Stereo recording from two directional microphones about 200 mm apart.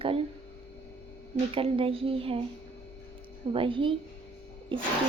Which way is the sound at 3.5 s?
25° right (ahead or behind).